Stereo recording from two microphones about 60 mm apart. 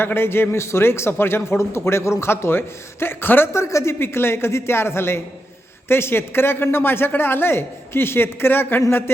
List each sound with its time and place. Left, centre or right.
0.0 s speech: left
3.5 s speech: left
4.0 s speech: left